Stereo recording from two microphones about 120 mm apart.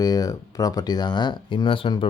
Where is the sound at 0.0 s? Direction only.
30° left (ahead or behind).